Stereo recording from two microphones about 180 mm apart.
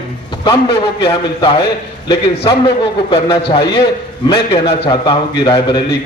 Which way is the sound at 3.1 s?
30° left (ahead or behind).